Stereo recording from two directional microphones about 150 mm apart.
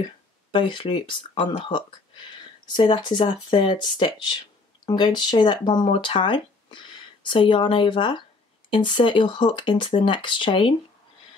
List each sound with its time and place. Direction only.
0.0 s speech: 30° left (ahead or behind)